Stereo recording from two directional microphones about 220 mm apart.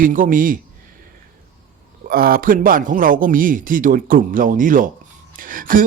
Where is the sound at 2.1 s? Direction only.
40° right (ahead or behind).